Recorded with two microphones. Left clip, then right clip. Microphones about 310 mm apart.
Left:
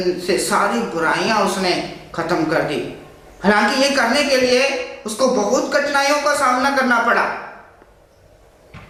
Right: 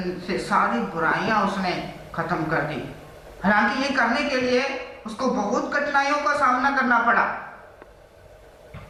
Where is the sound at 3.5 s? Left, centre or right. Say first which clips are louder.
Left 5 dB; centre.